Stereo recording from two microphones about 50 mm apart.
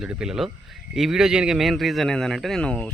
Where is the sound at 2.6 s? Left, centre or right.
Centre.